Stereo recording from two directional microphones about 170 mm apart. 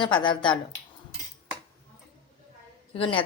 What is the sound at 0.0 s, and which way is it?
Speech, 25° left (ahead or behind).